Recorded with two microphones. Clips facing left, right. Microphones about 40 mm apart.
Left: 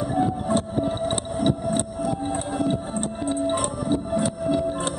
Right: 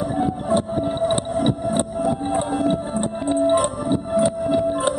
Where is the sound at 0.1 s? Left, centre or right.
Centre.